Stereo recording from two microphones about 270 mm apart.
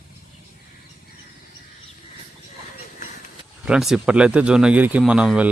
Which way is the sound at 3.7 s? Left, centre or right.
Centre.